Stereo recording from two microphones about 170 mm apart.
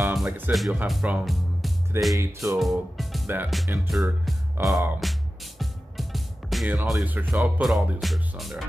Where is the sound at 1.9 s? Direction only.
15° right (ahead or behind).